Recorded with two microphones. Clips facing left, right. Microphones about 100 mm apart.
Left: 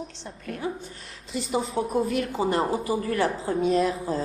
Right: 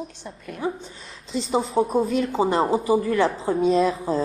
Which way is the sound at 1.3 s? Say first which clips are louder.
Right 5 dB; 25° right (ahead or behind).